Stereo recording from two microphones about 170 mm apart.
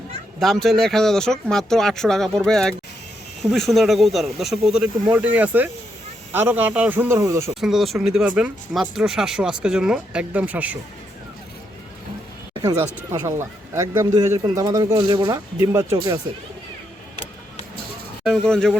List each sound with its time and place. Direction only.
0.3 s speech: centre (ahead or behind); by 7.5 s 15° right (ahead or behind)
7.5 s speech: centre (ahead or behind)
13.1 s speech: 15° right (ahead or behind)
18.4 s speech: 5° left (ahead or behind)